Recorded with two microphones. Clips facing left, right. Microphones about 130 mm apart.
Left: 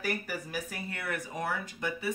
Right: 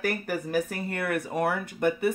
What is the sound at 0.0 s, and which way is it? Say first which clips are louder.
Speech: right 6 dB; 55° right (ahead or behind).